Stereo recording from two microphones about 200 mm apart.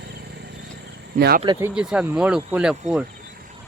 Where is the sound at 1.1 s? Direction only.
50° right (ahead or behind).